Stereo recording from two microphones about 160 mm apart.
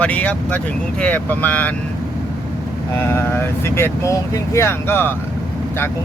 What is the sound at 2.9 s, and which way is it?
Speech, 15° left (ahead or behind).